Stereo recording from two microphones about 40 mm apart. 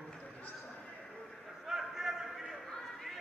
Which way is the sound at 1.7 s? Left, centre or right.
Centre.